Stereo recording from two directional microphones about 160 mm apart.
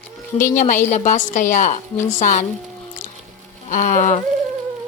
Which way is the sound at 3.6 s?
50° left (ahead or behind).